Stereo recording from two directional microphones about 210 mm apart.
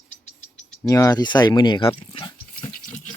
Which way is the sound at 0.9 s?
15° left (ahead or behind).